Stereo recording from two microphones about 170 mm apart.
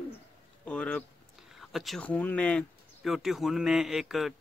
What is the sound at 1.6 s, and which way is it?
A man's voice, centre (ahead or behind).